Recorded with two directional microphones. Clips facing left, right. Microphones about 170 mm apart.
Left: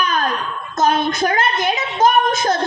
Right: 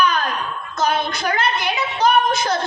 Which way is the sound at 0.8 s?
45° left (ahead or behind).